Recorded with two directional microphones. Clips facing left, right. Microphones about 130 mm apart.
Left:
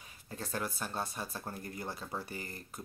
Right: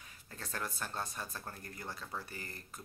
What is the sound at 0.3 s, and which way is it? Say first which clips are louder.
Speech: left 5 dB; 20° left (ahead or behind).